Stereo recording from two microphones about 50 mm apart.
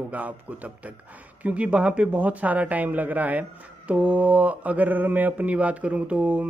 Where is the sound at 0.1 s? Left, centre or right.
Right.